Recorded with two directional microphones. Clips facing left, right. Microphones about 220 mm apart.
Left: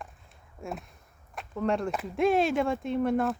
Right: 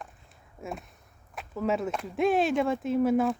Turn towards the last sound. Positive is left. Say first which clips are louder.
# right 2 dB
turn(degrees=0)  # may be behind; listen again after turning